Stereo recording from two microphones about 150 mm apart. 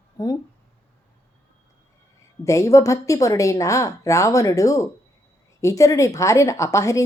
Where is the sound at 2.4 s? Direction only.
20° left (ahead or behind).